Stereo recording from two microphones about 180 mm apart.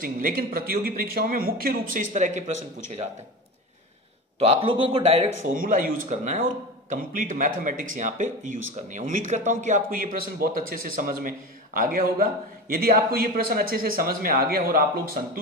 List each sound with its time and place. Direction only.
0.0 s speech: 50° right (ahead or behind)
4.4 s a man's voice: 30° right (ahead or behind); by 15.2 s 50° right (ahead or behind)